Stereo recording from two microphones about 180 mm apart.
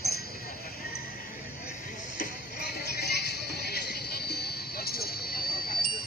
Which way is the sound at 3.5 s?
60° left (ahead or behind).